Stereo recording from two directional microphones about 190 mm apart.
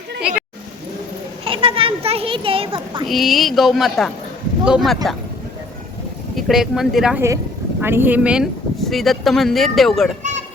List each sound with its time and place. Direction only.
0.2 s a sound: 5° right (ahead or behind)
1.5 s children playing: 30° right (ahead or behind)
3.1 s speech: centre (ahead or behind)
6.3 s speech: centre (ahead or behind)